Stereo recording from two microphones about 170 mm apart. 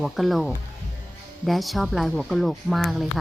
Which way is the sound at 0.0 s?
Centre (ahead or behind).